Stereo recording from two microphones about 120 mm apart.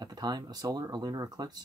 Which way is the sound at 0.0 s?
35° right (ahead or behind).